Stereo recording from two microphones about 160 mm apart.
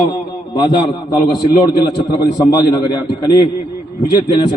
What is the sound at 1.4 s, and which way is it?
A man's voice, 25° left (ahead or behind).